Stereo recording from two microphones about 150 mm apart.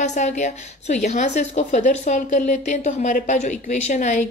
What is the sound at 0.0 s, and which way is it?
A woman's voice, 50° left (ahead or behind).